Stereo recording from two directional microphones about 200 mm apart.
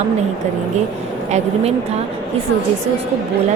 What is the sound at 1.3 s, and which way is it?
Speech, 35° right (ahead or behind).